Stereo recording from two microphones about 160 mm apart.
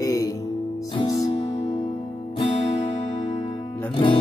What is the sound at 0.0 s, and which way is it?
Music, 20° left (ahead or behind).